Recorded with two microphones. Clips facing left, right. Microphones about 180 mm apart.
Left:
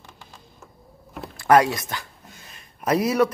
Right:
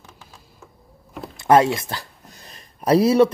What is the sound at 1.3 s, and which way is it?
Speech, 25° right (ahead or behind).